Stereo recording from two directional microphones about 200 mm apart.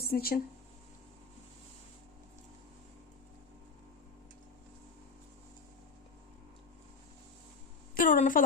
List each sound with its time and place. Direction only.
0.0 s speech: 50° left (ahead or behind)
7.9 s a woman's voice: 40° left (ahead or behind)